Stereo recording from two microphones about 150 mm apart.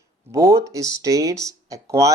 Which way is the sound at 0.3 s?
20° right (ahead or behind).